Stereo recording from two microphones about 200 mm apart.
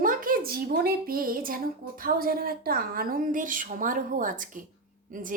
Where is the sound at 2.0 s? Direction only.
45° right (ahead or behind).